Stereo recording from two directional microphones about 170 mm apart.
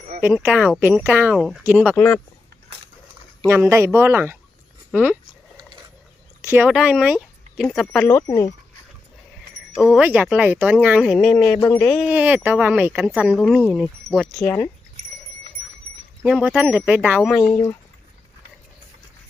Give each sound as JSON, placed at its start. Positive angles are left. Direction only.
{"t": 0.3, "sound": "speech", "side_deg": -10}
{"t": 1.4, "sound": "speech", "side_deg": 0}
{"t": 2.0, "sound": "speech", "side_deg": 10}
{"t": 3.4, "sound": "speech", "side_deg": -15}
{"t": 6.4, "sound": "speech", "side_deg": -10}
{"t": 8.0, "sound": "speech", "side_deg": 20}
{"t": 10.0, "sound": "speech", "side_deg": -10}
{"t": 11.9, "sound": "speech", "side_deg": -10}
{"t": 14.4, "sound": "speech", "side_deg": 10}
{"t": 16.2, "sound": "speech", "side_deg": 0}
{"t": 17.5, "sound": "speech", "side_deg": 20}